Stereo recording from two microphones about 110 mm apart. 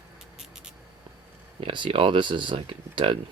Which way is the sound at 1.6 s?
50° right (ahead or behind).